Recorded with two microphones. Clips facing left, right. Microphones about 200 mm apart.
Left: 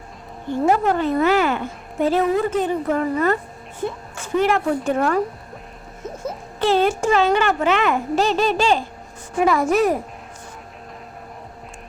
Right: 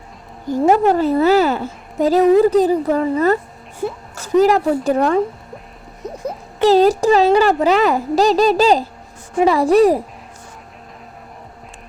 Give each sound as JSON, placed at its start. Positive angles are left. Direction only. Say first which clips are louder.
{"t": 0.4, "sound": "a woman's voice", "louder": "right 5 dB", "side_deg": -40}
{"t": 6.2, "sound": "speech", "louder": "right 6 dB", "side_deg": -35}